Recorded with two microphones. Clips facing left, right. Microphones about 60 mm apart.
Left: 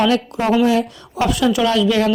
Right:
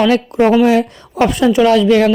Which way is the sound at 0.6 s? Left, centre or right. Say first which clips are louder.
Right 4 dB; right.